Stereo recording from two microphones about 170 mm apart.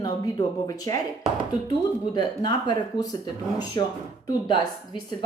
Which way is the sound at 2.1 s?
25° left (ahead or behind).